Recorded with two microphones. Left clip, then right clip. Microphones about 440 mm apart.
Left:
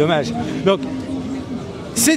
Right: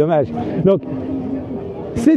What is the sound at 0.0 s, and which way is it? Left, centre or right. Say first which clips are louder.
Speech: right 2 dB; centre.